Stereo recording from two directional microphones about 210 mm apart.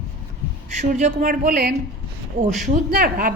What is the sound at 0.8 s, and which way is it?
A woman's voice, 35° right (ahead or behind).